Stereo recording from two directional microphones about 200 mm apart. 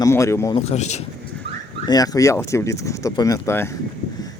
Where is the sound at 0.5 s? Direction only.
35° left (ahead or behind).